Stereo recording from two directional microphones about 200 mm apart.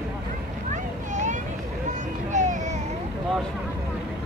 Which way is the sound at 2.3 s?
40° right (ahead or behind).